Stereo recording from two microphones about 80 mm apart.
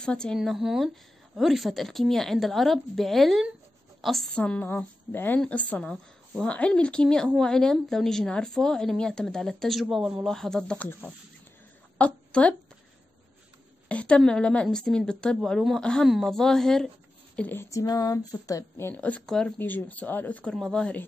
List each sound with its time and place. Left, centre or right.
0.0 s speech: centre
0.4 s a woman's voice: centre
4.3 s speech: centre
10.8 s a woman's voice: left
13.8 s speech: centre
17.4 s speech: left
17.6 s a sound: left
18.9 s speech: centre
19.6 s speech: left
20.5 s speech: centre